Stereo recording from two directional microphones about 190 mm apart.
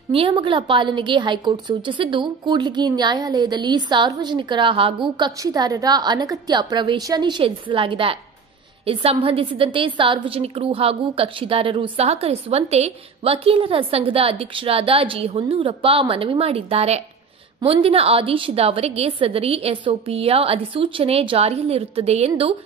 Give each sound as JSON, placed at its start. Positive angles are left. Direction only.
{"t": 0.1, "sound": "a woman's voice", "side_deg": -30}